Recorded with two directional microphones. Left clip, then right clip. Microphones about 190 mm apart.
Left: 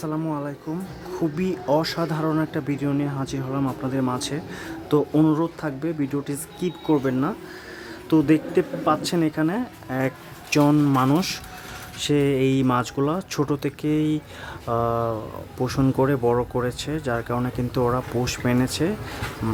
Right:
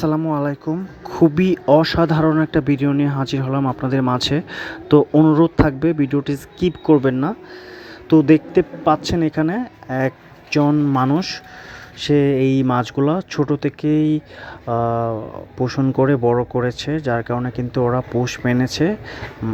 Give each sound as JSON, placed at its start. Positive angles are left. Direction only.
{"t": 0.0, "sound": "speech", "side_deg": -30}